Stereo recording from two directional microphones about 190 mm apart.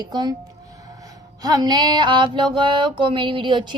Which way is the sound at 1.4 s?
20° right (ahead or behind).